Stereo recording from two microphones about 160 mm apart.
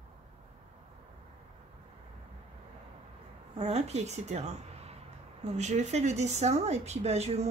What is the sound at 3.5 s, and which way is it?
A woman's voice, 40° right (ahead or behind).